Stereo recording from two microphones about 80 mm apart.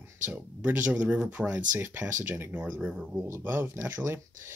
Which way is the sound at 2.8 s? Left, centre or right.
Centre.